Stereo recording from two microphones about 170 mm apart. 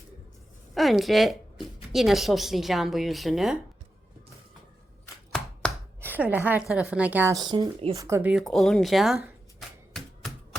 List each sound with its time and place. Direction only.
0.7 s a woman's voice: centre (ahead or behind)
5.6 s chopping: 5° left (ahead or behind)
6.0 s a woman's voice: 10° right (ahead or behind)
7.3 s speech: 25° right (ahead or behind)
7.9 s a sound: 15° right (ahead or behind); by 10.3 s centre (ahead or behind)